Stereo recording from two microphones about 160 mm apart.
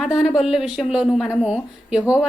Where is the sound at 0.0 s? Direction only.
5° right (ahead or behind).